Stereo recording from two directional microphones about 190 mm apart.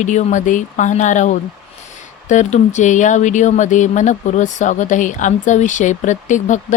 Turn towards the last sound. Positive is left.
turn(degrees=40)  # may be behind; listen again after turning